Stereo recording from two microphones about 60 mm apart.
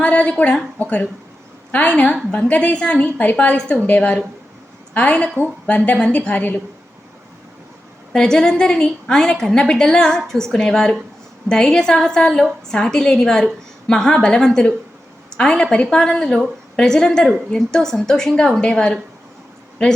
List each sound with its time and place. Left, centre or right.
0.0 s a woman's voice: left
8.1 s a woman's voice: centre